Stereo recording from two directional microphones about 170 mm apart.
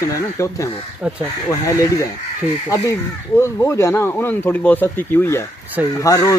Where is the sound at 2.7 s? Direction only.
20° left (ahead or behind).